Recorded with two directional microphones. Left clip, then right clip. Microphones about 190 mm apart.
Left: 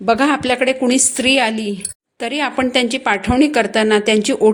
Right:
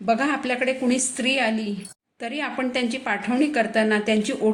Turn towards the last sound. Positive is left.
turn(degrees=50)  # may be behind; listen again after turning